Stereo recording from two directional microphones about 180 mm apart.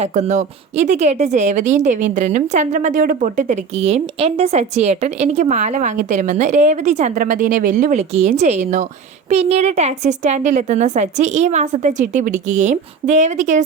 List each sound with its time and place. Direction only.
0.0 s speech: 40° right (ahead or behind)